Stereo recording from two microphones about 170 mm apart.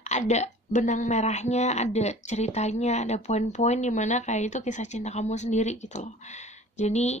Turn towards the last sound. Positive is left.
turn(degrees=40)  # may be behind; listen again after turning